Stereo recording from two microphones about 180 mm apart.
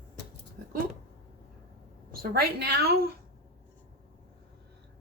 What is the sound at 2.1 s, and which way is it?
Speech, 55° right (ahead or behind).